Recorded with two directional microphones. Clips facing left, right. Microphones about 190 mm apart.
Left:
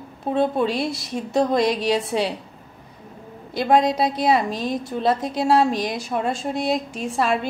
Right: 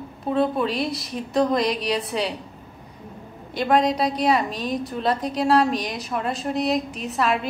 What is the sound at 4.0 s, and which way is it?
Speech, 30° left (ahead or behind).